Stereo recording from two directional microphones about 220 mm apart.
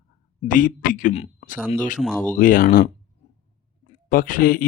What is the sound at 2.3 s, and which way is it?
Speech, 40° left (ahead or behind).